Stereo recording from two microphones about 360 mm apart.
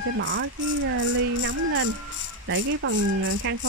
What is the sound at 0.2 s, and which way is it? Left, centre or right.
Speech, right.